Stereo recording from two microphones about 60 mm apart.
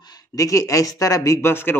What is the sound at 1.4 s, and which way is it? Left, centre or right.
Speech, left.